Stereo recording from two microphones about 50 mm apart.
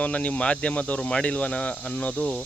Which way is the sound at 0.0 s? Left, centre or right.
Left.